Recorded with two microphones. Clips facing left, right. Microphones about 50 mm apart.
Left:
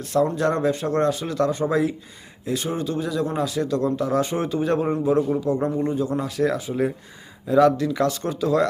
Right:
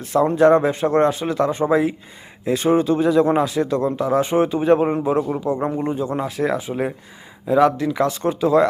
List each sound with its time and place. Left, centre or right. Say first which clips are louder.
0.0 s speech: right 6 dB; right
2.4 s a man's voice: right 8 dB; right